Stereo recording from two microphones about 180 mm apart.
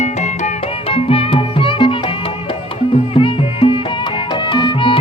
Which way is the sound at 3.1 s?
30° left (ahead or behind).